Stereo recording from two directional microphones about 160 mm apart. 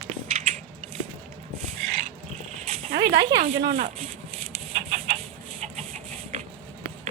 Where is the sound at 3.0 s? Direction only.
20° right (ahead or behind).